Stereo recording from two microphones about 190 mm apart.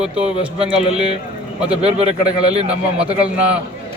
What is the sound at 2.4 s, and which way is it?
Speech, 35° right (ahead or behind).